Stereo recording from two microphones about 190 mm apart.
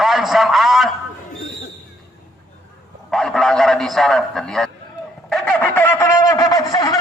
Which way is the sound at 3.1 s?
Centre (ahead or behind).